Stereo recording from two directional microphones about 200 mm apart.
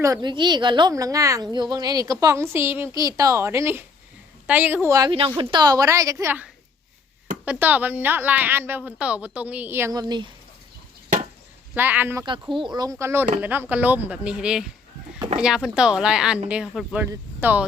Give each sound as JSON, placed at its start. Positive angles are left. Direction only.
{"t": 0.0, "sound": "a woman's voice", "side_deg": -20}
{"t": 11.7, "sound": "a woman's voice", "side_deg": -10}
{"t": 12.2, "sound": "a woman's voice", "side_deg": -25}